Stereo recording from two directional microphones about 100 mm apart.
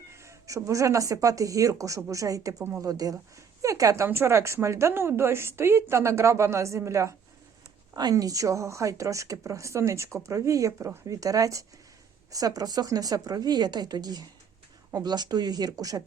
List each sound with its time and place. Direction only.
0.1 s a woman's voice: 30° right (ahead or behind)